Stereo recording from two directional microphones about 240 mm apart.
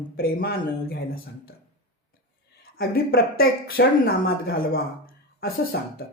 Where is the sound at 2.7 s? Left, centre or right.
Left.